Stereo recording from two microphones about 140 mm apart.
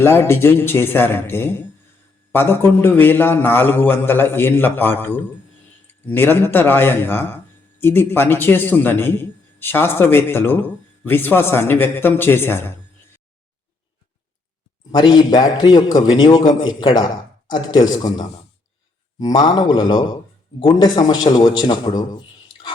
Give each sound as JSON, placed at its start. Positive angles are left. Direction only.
{"t": 0.0, "sound": "a man's voice", "side_deg": 20}
{"t": 14.9, "sound": "a man's voice", "side_deg": 30}